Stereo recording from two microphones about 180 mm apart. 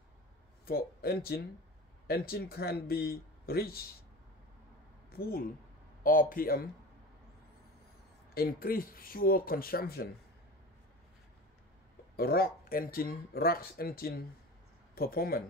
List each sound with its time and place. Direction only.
0.7 s speech: 55° left (ahead or behind)
5.1 s speech: 55° left (ahead or behind)
8.4 s speech: 55° left (ahead or behind)
12.2 s speech: 55° left (ahead or behind)